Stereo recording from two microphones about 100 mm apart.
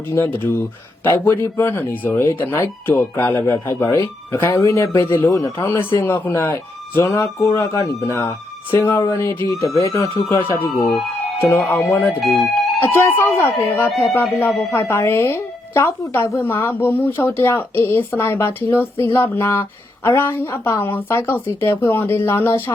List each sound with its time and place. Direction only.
0.1 s speech: 20° left (ahead or behind)
11.3 s speech: 25° left (ahead or behind)
12.2 s speech: centre (ahead or behind)
12.8 s speech: 20° left (ahead or behind)